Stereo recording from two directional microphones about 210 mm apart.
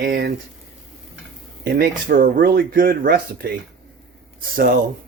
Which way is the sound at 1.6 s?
45° right (ahead or behind).